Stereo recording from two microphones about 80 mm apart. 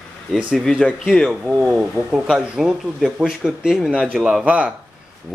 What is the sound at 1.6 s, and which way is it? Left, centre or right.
Speech, centre.